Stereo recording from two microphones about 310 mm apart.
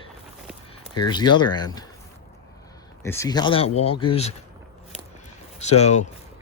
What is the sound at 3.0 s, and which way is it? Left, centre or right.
Speech, centre.